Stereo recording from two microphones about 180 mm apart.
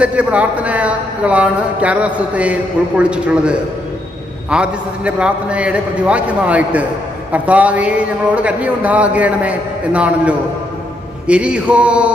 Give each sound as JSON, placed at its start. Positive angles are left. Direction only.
{"t": 0.0, "sound": "a man's voice", "side_deg": -5}